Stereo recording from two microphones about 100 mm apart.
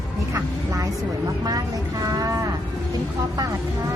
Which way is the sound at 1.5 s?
40° right (ahead or behind).